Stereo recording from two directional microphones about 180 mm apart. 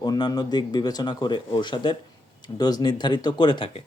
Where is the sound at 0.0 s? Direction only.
20° left (ahead or behind).